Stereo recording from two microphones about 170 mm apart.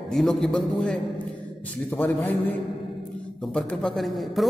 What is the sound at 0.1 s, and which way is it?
Speech, centre (ahead or behind).